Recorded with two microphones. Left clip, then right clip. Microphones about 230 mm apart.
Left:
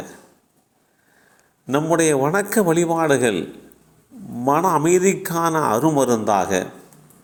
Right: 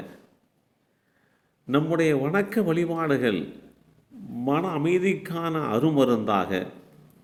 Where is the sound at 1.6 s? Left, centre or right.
Centre.